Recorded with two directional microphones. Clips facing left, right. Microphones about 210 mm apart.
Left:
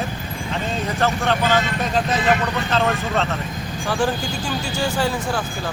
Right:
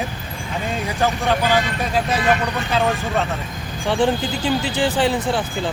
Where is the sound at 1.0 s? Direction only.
10° right (ahead or behind).